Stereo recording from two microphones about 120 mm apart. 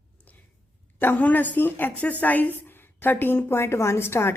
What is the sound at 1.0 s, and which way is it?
A woman's voice, 15° left (ahead or behind).